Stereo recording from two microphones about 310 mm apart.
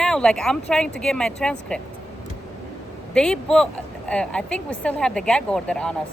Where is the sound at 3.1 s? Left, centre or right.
Centre.